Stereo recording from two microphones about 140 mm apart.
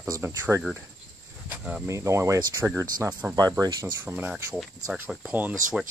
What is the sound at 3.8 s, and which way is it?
Speech, 15° right (ahead or behind).